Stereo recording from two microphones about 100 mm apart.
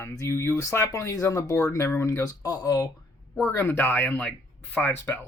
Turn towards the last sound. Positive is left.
turn(degrees=20)  # may be behind; listen again after turning